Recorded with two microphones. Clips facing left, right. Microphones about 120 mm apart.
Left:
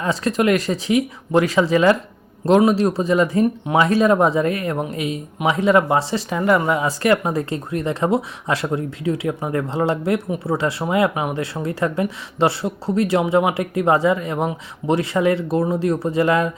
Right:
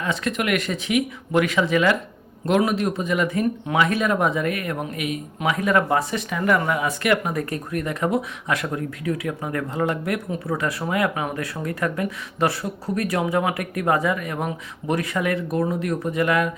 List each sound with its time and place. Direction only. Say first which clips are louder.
0.0 s speech: left 6 dB; 35° left (ahead or behind)